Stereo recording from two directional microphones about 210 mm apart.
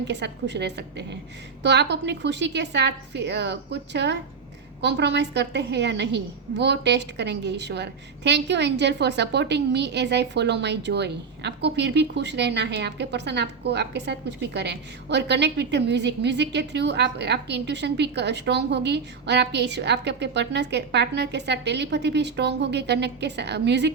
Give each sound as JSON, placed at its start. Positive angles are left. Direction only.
{"t": 0.0, "sound": "a woman's voice", "side_deg": -55}